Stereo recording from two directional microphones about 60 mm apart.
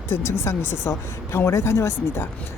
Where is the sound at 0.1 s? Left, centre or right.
Left.